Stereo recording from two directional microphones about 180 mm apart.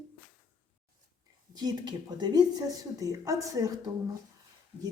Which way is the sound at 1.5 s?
20° right (ahead or behind).